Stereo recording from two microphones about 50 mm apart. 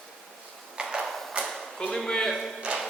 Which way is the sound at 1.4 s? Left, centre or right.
Right.